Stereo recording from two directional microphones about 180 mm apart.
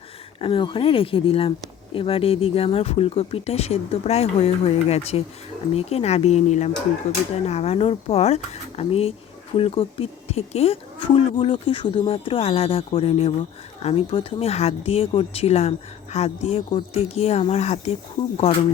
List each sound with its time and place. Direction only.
0.3 s speech: 30° left (ahead or behind)